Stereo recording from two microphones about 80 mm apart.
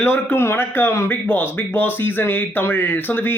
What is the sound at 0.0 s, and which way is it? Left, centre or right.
Speech, left.